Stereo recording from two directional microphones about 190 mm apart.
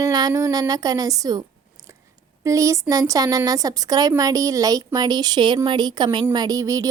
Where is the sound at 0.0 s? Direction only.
20° right (ahead or behind).